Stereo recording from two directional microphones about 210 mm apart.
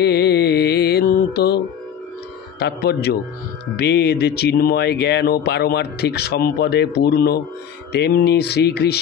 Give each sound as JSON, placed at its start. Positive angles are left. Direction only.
{"t": 0.0, "sound": "mantra", "side_deg": 50}
{"t": 2.6, "sound": "speech", "side_deg": 50}